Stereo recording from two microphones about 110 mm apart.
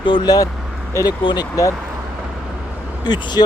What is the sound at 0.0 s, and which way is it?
Speech, 50° left (ahead or behind).